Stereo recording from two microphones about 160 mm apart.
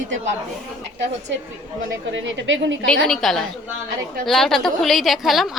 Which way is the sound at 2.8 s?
5° left (ahead or behind).